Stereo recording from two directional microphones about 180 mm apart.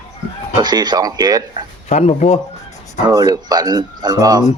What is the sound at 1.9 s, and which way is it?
Speech, 40° left (ahead or behind).